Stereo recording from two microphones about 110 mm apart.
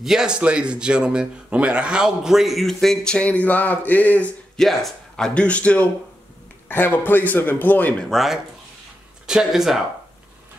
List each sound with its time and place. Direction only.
0.0 s speech: 5° right (ahead or behind); by 4.3 s 15° left (ahead or behind)
4.6 s speech: 5° left (ahead or behind)
8.1 s speech: centre (ahead or behind)